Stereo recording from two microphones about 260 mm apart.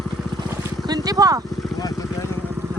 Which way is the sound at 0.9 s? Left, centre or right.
Centre.